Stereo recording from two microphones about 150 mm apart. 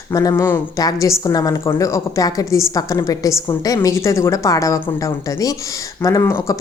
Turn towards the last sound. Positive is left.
turn(degrees=20)  # may be behind; listen again after turning